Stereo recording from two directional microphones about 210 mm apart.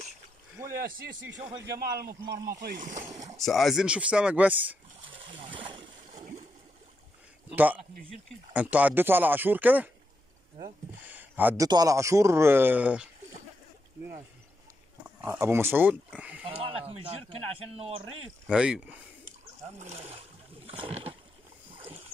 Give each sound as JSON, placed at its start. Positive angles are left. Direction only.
{"t": 0.7, "sound": "speech", "side_deg": -45}
{"t": 3.3, "sound": "speech", "side_deg": 0}
{"t": 5.5, "sound": "a sound", "side_deg": -25}
{"t": 6.1, "sound": "a sound", "side_deg": -35}
{"t": 7.5, "sound": "speech", "side_deg": -10}
{"t": 15.2, "sound": "speech", "side_deg": -15}
{"t": 16.4, "sound": "speech", "side_deg": -25}
{"t": 18.5, "sound": "speech", "side_deg": -5}
{"t": 19.8, "sound": "speech", "side_deg": -30}
{"t": 20.7, "sound": "rowboat", "side_deg": -30}